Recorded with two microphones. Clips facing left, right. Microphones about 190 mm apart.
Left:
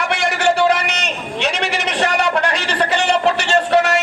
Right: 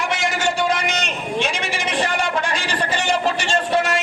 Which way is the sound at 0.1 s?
65° left (ahead or behind).